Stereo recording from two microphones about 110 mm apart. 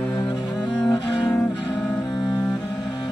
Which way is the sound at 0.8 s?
45° left (ahead or behind).